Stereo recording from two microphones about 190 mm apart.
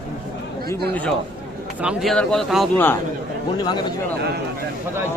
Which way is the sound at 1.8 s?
Centre (ahead or behind).